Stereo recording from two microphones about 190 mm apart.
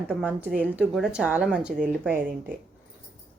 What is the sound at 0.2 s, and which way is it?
Speech, 10° right (ahead or behind).